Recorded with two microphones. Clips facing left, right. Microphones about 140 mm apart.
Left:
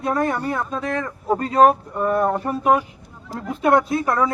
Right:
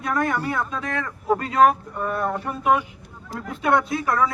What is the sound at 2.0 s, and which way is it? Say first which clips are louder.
Speech: left 6 dB; 20° left (ahead or behind).